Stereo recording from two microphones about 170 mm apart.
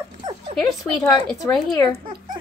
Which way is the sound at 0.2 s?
30° right (ahead or behind).